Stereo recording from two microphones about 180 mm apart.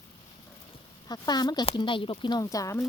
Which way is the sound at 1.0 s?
20° left (ahead or behind).